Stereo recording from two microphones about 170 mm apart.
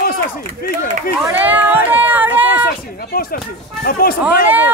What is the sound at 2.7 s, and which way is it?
A man's voice, 60° left (ahead or behind).